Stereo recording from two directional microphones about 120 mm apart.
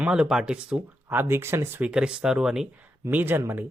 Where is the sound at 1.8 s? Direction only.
5° right (ahead or behind).